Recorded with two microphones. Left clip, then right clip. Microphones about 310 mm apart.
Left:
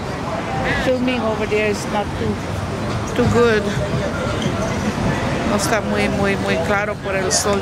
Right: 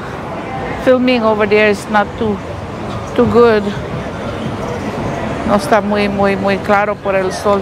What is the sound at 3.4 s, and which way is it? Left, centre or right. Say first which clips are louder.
Speech: right 6 dB; centre.